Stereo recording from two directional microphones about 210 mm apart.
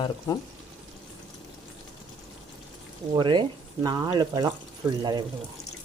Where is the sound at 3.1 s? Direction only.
20° right (ahead or behind).